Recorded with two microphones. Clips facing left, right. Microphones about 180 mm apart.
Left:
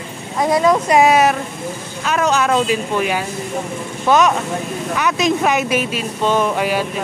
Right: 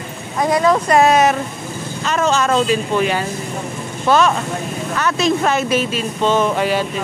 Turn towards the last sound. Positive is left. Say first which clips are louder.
# right 1 dB
turn(degrees=10)  # may be behind; listen again after turning